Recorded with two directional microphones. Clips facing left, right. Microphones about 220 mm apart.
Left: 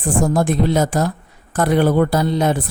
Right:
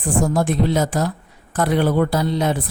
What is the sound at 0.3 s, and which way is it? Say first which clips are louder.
A woman's voice: left 2 dB; 50° left (ahead or behind).